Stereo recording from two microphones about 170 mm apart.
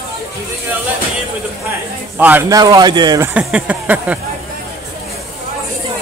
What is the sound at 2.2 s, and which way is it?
A man's voice, 10° right (ahead or behind).